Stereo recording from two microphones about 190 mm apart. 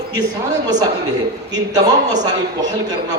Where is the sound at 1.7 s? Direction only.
20° right (ahead or behind).